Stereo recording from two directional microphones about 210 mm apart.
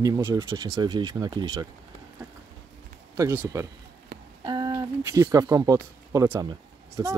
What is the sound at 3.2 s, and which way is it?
Speech, 15° right (ahead or behind).